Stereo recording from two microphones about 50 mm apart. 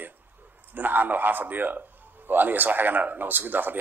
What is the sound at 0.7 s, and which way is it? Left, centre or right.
A man's voice, right.